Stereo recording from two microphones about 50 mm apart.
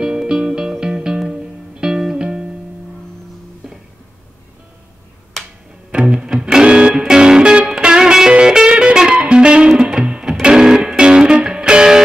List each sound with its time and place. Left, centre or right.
0.0 s music: centre
5.4 s music: centre
5.9 s music: centre